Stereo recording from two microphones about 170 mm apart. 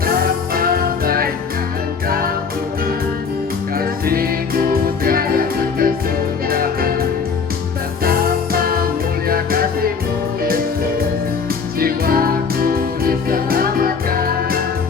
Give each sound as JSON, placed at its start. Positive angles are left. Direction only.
{"t": 0.0, "sound": "music", "side_deg": -60}
{"t": 3.8, "sound": "music", "side_deg": -60}
{"t": 8.0, "sound": "music", "side_deg": -60}
{"t": 11.8, "sound": "music", "side_deg": -60}